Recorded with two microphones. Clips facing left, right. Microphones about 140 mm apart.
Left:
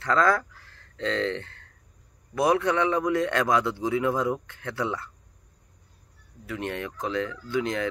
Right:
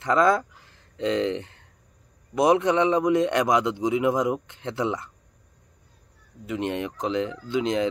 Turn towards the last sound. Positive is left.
turn(degrees=-20)  # may be behind; listen again after turning